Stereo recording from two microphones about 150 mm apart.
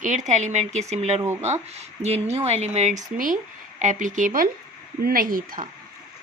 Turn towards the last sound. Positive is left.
turn(degrees=-70)  # may be behind; listen again after turning